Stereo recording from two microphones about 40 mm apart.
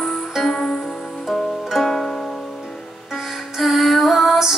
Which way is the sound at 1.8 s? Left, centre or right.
Centre.